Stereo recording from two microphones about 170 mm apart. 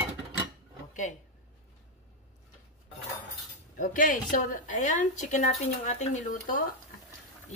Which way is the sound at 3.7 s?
50° left (ahead or behind).